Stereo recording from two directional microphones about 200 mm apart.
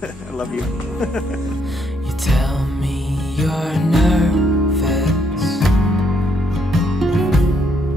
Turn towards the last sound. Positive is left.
turn(degrees=0)  # may be behind; listen again after turning